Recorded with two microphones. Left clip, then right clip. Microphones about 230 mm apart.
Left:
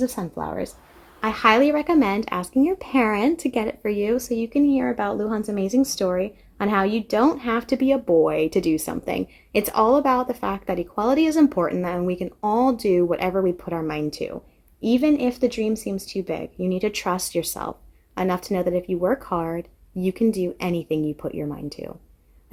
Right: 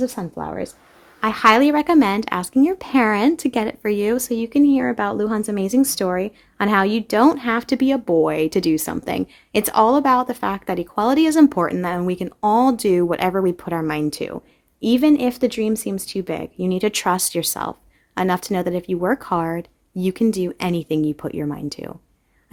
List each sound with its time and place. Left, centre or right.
0.0 s speech: right
1.2 s speech: right